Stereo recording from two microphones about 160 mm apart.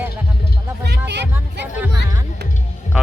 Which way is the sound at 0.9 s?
90° right.